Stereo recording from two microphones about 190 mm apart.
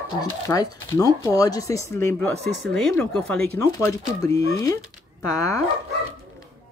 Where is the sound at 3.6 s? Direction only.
15° left (ahead or behind).